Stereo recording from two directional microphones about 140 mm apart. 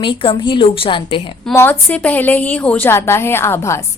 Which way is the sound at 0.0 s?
35° left (ahead or behind).